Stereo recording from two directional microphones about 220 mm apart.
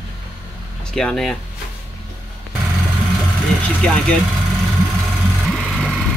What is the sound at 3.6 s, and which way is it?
Speech, 5° left (ahead or behind).